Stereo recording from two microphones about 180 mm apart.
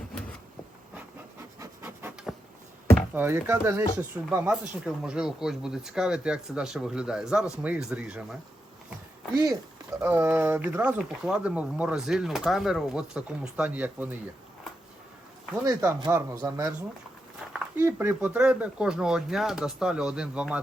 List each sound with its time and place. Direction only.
1.5 s rub: 15° right (ahead or behind)
2.9 s speech: 10° right (ahead or behind)
10.0 s speech: 10° right (ahead or behind)
15.6 s speech: 15° right (ahead or behind)
17.4 s a sound: 5° right (ahead or behind)
17.7 s speech: 15° right (ahead or behind)